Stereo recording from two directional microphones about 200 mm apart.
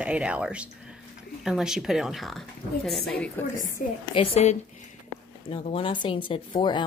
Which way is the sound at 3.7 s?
25° left (ahead or behind).